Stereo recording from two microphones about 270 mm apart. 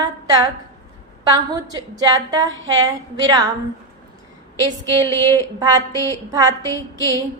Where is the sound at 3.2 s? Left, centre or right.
Centre.